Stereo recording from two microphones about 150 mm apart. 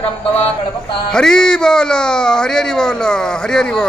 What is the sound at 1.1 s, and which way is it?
Speech, 5° left (ahead or behind).